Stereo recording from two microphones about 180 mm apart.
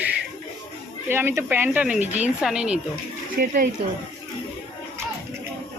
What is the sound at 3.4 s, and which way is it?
Speech, 45° right (ahead or behind).